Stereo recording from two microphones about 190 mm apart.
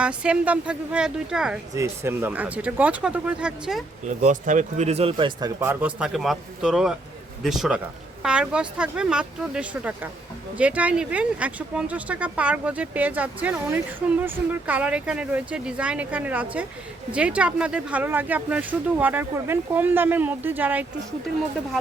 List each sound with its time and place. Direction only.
0.0 s speech: 5° right (ahead or behind)
1.7 s speech: 15° right (ahead or behind)
4.0 s speech: 40° right (ahead or behind); by 5.5 s 25° right (ahead or behind)
5.5 s speech: 10° right (ahead or behind)